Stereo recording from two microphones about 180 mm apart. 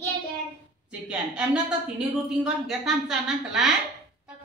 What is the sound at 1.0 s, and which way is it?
A woman's voice, 5° right (ahead or behind).